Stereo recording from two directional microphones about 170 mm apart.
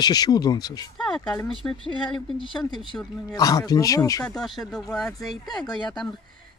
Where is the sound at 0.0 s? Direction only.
25° left (ahead or behind).